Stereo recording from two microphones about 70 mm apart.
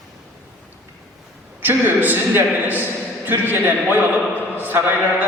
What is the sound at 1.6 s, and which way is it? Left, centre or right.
A man's voice, right.